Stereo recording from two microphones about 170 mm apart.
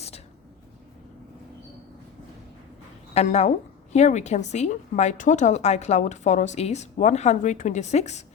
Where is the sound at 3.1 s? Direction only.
40° left (ahead or behind).